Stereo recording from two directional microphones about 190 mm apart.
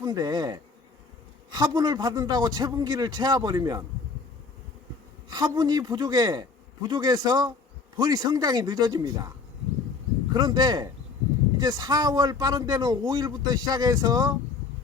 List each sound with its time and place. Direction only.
0.0 s bee: 20° right (ahead or behind)
1.5 s speech: 20° right (ahead or behind)
5.3 s speech: 20° right (ahead or behind)
10.3 s speech: 20° right (ahead or behind)